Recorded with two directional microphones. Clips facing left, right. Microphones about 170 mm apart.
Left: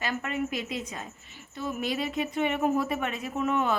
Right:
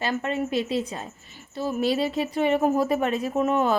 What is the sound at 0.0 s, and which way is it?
A woman's voice, 30° right (ahead or behind).